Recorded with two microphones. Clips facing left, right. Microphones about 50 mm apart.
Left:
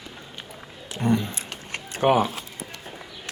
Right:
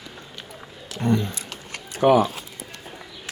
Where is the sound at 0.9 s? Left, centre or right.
Centre.